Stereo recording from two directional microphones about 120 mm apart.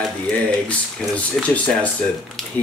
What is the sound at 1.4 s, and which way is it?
Speech, 5° left (ahead or behind).